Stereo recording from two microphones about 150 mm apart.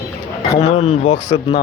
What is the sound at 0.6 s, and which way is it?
Speech, 45° left (ahead or behind).